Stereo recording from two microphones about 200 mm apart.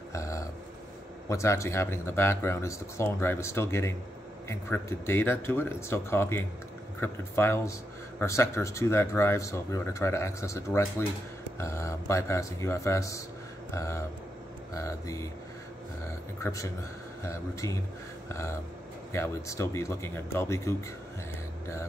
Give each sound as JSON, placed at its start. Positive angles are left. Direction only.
{"t": 0.1, "sound": "a sound", "side_deg": 15}
{"t": 1.3, "sound": "speech", "side_deg": 15}
{"t": 16.4, "sound": "speech", "side_deg": 15}
{"t": 19.1, "sound": "speech", "side_deg": 15}